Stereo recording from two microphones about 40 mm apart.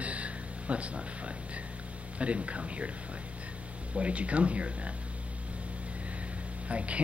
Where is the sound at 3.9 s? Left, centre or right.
Right.